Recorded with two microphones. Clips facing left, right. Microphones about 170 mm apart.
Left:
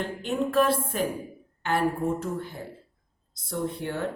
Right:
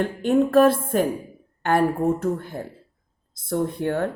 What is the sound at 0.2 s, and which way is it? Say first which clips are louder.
Speech: right 8 dB; 50° right (ahead or behind).